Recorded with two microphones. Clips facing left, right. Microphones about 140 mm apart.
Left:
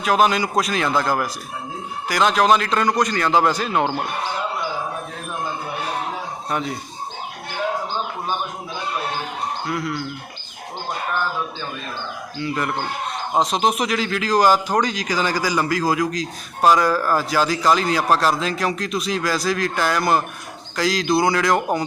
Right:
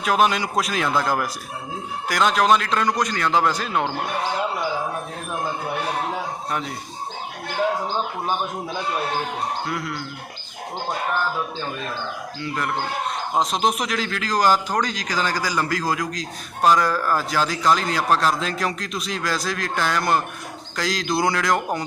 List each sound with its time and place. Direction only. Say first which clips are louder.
0.0 s speech: left 2 dB; centre (ahead or behind)
9.6 s speech: left 3 dB; centre (ahead or behind)
12.4 s speech: left 3 dB; 5° left (ahead or behind)